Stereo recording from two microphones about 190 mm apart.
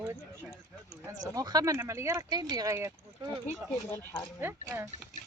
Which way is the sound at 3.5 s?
10° left (ahead or behind).